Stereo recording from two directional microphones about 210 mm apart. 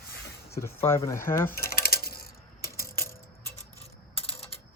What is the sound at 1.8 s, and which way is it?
Coin, 45° left (ahead or behind).